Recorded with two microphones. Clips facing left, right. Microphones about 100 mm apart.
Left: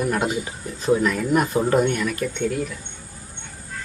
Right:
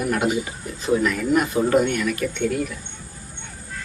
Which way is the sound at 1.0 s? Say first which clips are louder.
Even; 40° left (ahead or behind).